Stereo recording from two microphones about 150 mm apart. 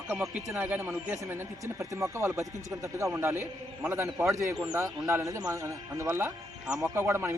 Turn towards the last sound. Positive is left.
turn(degrees=-20)  # may be behind; listen again after turning